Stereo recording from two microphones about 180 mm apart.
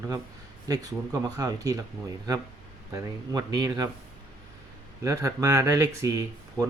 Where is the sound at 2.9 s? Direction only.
20° right (ahead or behind).